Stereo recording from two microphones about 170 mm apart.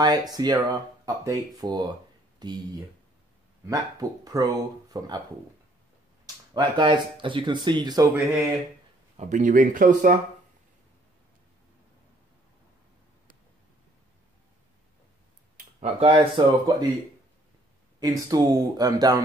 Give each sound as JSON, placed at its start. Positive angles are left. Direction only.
{"t": 0.0, "sound": "speech", "side_deg": -25}
{"t": 6.5, "sound": "speech", "side_deg": -25}
{"t": 9.1, "sound": "speech", "side_deg": -45}
{"t": 15.8, "sound": "speech", "side_deg": -30}
{"t": 18.0, "sound": "speech", "side_deg": -20}